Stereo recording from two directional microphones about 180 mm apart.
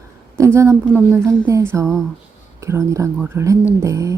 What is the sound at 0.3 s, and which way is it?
Speech, 15° right (ahead or behind).